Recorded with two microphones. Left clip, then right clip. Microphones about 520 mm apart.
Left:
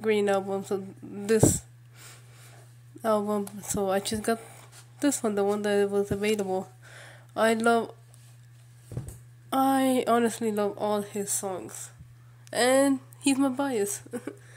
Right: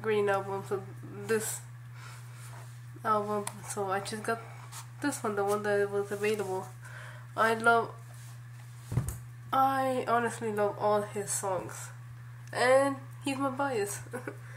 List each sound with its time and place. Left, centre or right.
0.0 s speech: left
1.2 s a sound: left
3.0 s speech: left
9.5 s speech: left